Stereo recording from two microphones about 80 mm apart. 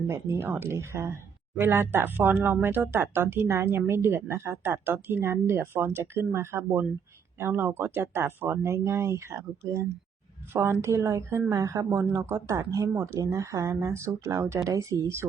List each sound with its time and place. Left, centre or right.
0.1 s speech: right
10.5 s speech: right
13.1 s speech: right